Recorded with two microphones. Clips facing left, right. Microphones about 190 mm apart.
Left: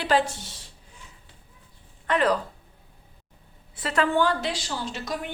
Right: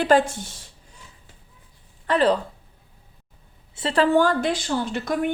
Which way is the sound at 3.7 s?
30° right (ahead or behind).